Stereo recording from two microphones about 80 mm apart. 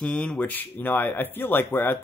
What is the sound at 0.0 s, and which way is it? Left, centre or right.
Speech, centre.